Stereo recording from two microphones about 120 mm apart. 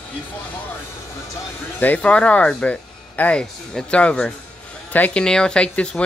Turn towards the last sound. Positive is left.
turn(degrees=10)  # may be behind; listen again after turning